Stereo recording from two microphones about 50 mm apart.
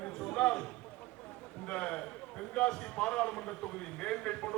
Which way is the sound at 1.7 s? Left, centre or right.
Left.